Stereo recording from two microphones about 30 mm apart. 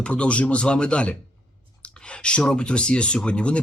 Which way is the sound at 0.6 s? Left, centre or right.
Left.